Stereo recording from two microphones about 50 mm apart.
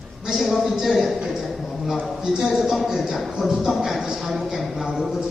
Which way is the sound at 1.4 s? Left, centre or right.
Centre.